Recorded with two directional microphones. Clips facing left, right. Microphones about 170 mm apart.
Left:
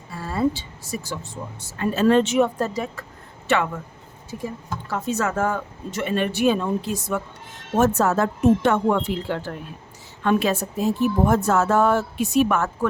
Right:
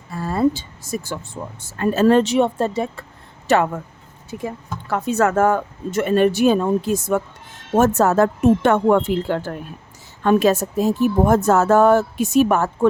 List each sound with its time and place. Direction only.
0.2 s a woman's voice: 45° right (ahead or behind); by 3.0 s 30° right (ahead or behind)
3.4 s speech: 40° right (ahead or behind)
4.3 s speech: 70° right (ahead or behind)
4.9 s a woman's voice: 60° right (ahead or behind); by 12.9 s 35° right (ahead or behind)